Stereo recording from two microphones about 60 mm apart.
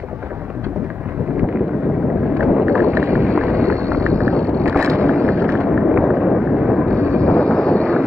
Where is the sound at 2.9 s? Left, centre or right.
Right.